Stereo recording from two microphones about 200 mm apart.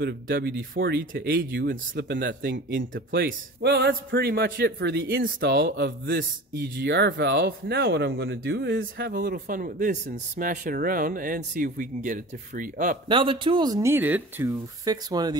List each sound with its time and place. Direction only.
0.0 s speech: 55° right (ahead or behind)
2.5 s speech: 70° right (ahead or behind)
3.2 s speech: 50° right (ahead or behind)
13.1 s speech: 25° right (ahead or behind)